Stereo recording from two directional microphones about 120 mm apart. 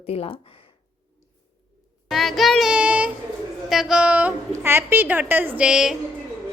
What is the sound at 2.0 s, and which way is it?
Child singing, centre (ahead or behind).